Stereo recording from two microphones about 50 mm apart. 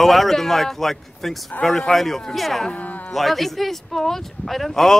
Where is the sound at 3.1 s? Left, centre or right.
Centre.